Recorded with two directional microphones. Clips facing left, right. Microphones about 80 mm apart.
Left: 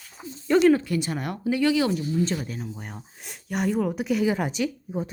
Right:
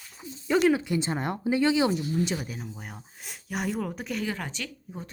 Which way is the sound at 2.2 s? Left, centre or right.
Centre.